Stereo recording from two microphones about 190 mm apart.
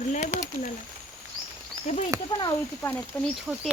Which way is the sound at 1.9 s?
35° left (ahead or behind).